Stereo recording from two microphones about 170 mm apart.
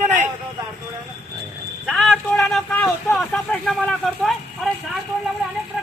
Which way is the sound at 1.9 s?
Centre (ahead or behind).